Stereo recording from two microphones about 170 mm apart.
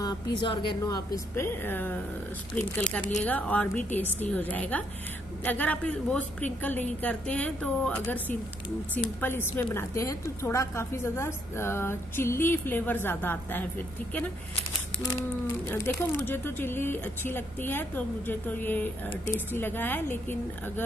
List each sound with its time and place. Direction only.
0.0 s a woman's voice: 25° left (ahead or behind)
15.0 s a woman's voice: 15° left (ahead or behind)